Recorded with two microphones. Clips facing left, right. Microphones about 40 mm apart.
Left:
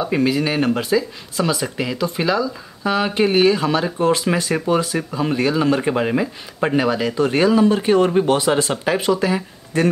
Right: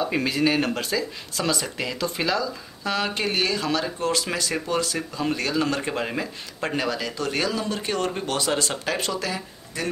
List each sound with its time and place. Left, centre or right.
0.0 s speech: centre
9.7 s speech: left